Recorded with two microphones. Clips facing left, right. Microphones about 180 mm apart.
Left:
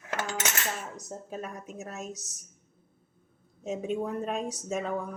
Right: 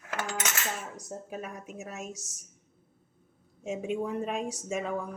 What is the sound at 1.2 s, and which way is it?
Speech, 10° right (ahead or behind).